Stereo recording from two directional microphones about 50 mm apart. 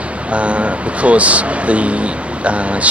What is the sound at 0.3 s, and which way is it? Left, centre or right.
Speech, right.